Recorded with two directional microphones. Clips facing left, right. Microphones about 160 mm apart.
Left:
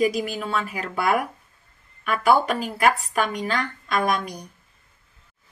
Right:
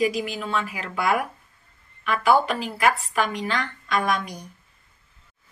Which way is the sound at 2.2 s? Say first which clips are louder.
Left 1 dB; 40° left (ahead or behind).